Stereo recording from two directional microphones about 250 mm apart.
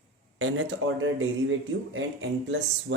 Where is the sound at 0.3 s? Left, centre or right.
Right.